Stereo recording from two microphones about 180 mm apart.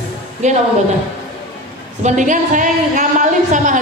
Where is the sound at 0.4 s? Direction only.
40° right (ahead or behind).